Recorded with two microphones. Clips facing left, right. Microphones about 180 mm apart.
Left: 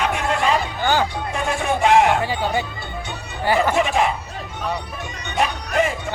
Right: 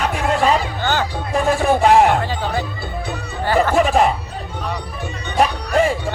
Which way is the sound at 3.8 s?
35° right (ahead or behind).